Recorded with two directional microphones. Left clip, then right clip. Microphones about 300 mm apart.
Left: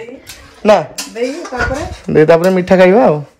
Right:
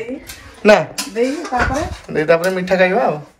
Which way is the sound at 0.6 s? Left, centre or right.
Centre.